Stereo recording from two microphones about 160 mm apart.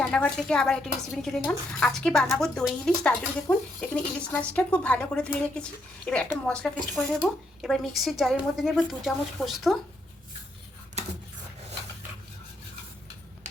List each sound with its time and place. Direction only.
0.0 s a woman's voice: 5° left (ahead or behind)